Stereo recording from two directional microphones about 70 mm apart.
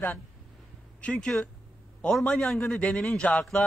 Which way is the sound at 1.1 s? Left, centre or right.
Centre.